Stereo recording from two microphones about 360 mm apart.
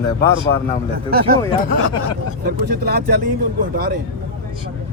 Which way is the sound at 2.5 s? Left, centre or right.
Right.